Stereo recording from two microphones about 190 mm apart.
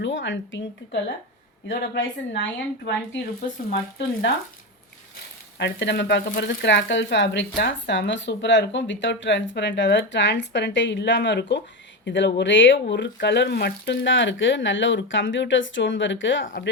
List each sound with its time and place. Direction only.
0.0 s speech: 75° left (ahead or behind)
2.0 s speech: 70° left (ahead or behind)
5.5 s speech: 65° left (ahead or behind)